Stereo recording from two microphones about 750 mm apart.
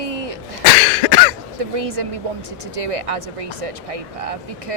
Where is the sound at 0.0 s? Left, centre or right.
Right.